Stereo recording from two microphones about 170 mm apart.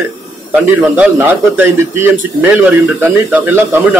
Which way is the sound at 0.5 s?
10° right (ahead or behind).